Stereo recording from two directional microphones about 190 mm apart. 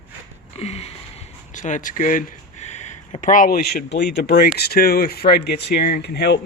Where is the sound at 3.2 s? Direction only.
45° left (ahead or behind).